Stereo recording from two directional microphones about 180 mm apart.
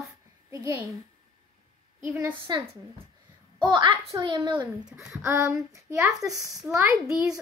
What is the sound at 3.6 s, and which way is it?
A child's voice, 25° right (ahead or behind).